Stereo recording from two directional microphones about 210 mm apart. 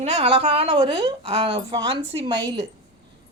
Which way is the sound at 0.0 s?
25° right (ahead or behind).